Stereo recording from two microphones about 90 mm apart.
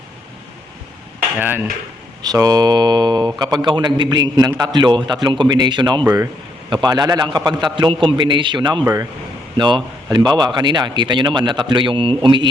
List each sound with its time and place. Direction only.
1.4 s speech: 20° right (ahead or behind)
2.2 s a man's voice: 45° right (ahead or behind)
8.8 s a man's voice: 35° right (ahead or behind)
9.6 s a man's voice: 60° right (ahead or behind)